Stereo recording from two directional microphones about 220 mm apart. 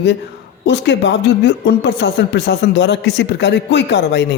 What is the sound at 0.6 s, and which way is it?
Speech, 50° left (ahead or behind).